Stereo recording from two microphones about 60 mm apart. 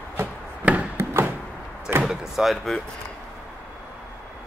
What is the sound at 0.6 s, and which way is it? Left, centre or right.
Wood, right.